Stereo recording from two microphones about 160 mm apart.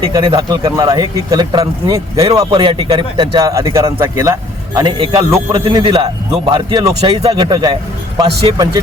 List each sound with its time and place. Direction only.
0.1 s speech: 25° right (ahead or behind)